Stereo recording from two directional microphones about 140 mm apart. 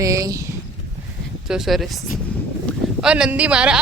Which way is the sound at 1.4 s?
5° right (ahead or behind).